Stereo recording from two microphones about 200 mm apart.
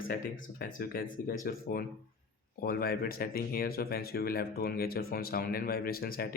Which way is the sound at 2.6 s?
50° left (ahead or behind).